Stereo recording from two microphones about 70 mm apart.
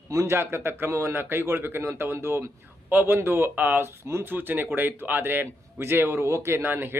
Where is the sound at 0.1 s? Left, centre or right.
Right.